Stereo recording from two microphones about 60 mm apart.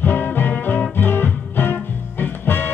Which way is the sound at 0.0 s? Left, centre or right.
Left.